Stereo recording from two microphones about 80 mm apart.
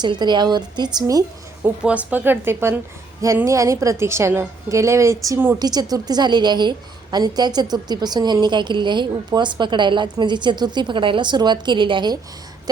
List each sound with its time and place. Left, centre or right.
0.0 s a woman's voice: right
0.9 s a woman's voice: right
1.8 s speech: centre
3.4 s a woman's voice: right
5.5 s a woman's voice: right